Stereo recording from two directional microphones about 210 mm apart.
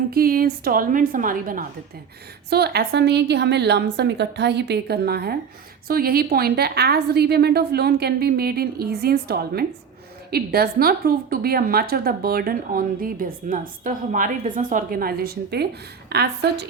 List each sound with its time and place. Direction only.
0.1 s a woman's voice: 45° right (ahead or behind)